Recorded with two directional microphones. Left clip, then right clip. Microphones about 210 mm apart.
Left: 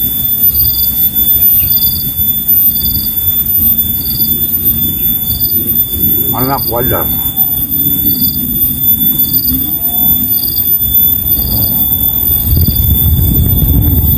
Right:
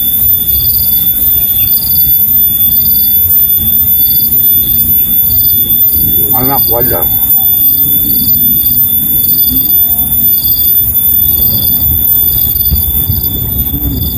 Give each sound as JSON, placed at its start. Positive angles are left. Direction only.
{"t": 6.0, "sound": "speech", "side_deg": -20}